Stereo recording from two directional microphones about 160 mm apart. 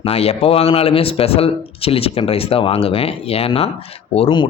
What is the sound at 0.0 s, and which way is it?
Speech, 40° left (ahead or behind).